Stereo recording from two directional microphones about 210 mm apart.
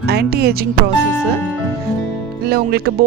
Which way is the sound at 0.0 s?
50° right (ahead or behind).